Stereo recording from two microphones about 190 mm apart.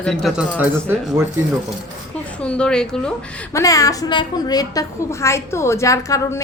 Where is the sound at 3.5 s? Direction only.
15° left (ahead or behind).